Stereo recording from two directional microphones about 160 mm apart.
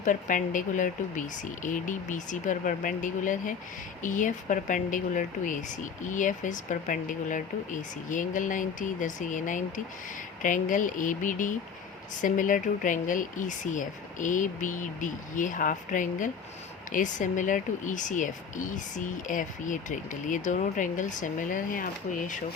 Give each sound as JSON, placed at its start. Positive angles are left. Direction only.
{"t": 0.0, "sound": "speech", "side_deg": 55}